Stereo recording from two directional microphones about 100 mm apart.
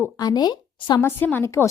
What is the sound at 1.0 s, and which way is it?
Speech, 20° left (ahead or behind).